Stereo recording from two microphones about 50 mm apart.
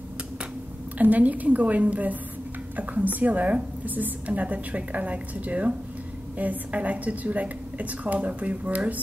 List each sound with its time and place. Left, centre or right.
0.9 s a woman's voice: right